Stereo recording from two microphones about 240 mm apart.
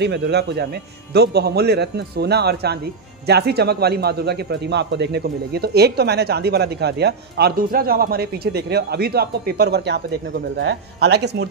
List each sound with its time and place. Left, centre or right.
0.0 s a man's voice: right